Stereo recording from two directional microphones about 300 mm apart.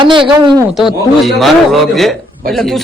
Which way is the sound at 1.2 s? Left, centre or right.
Centre.